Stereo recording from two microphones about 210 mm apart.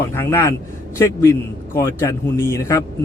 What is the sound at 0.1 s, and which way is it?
A man's voice, 10° left (ahead or behind).